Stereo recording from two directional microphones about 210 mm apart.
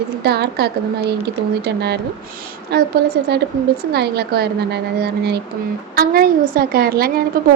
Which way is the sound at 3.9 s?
50° right (ahead or behind).